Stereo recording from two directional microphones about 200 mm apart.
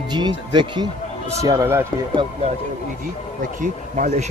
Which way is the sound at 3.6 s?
40° right (ahead or behind).